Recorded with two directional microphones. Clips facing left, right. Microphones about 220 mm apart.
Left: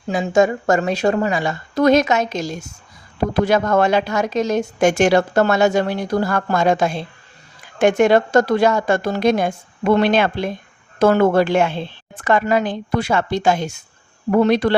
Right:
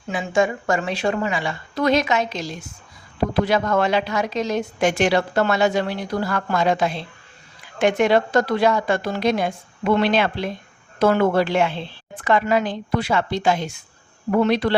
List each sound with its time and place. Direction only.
0.1 s a woman's voice: 40° left (ahead or behind)